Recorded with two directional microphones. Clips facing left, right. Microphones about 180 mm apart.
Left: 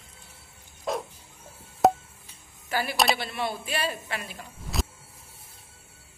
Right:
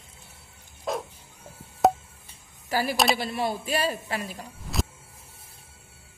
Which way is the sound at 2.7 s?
35° right (ahead or behind).